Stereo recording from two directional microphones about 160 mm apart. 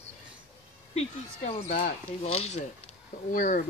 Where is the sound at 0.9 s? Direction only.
45° left (ahead or behind).